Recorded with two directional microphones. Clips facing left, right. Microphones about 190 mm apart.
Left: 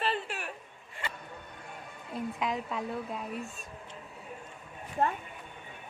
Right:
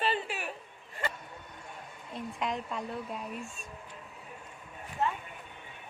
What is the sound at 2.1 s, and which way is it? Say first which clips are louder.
A woman's voice: left 2 dB; centre (ahead or behind).